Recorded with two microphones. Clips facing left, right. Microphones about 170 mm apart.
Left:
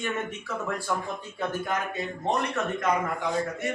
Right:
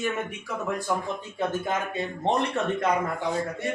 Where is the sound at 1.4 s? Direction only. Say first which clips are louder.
Right 2 dB; 25° right (ahead or behind).